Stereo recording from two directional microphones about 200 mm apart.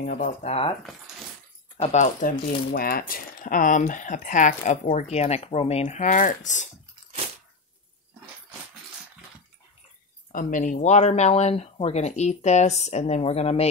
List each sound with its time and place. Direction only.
0.0 s speech: 40° left (ahead or behind)
1.8 s speech: 35° left (ahead or behind)
10.3 s speech: 40° left (ahead or behind)